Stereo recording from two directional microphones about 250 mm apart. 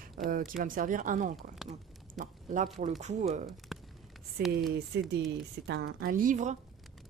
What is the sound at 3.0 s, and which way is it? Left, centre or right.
Speech, right.